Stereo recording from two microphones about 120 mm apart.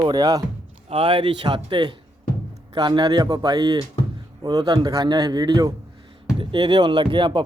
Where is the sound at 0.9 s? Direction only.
45° right (ahead or behind).